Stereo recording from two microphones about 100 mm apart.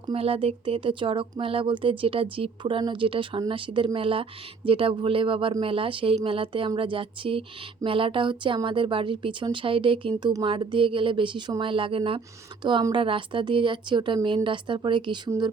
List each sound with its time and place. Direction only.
0.1 s speech: 75° right (ahead or behind); by 15.2 s 55° right (ahead or behind)